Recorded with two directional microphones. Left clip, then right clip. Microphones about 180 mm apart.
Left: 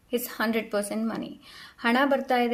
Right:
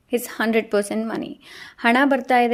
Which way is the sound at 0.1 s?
40° right (ahead or behind).